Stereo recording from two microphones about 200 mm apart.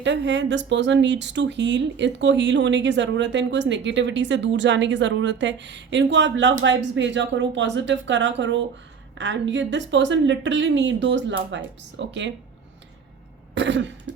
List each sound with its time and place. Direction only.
0.0 s speech: 65° right (ahead or behind)
13.5 s cough: 65° right (ahead or behind)